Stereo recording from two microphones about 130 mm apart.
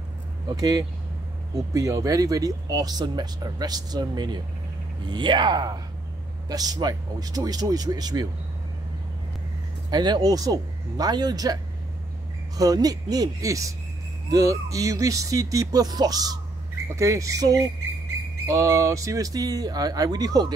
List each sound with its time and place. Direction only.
0.5 s speech: 30° right (ahead or behind)
9.8 s speech: 30° right (ahead or behind)